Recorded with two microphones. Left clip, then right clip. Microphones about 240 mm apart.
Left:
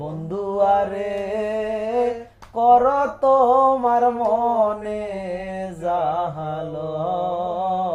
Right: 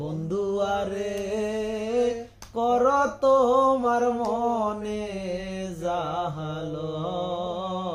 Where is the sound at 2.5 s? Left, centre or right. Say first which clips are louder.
Left 7 dB; right.